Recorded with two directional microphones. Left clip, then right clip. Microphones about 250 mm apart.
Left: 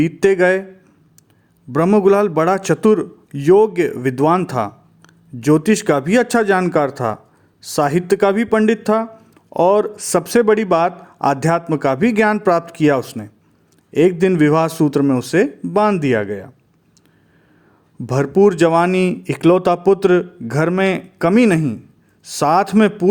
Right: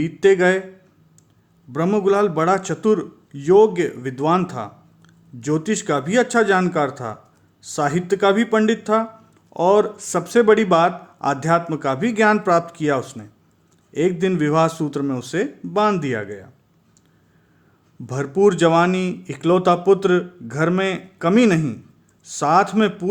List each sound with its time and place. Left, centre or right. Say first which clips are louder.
0.0 s speech: left 2 dB; left
1.7 s speech: left 5 dB; left
18.0 s speech: left 4 dB; left